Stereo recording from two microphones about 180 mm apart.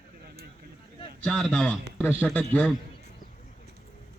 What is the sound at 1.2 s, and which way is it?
A man's voice, 5° left (ahead or behind).